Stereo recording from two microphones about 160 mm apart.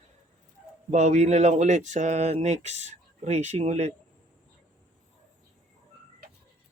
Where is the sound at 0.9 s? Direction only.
45° right (ahead or behind).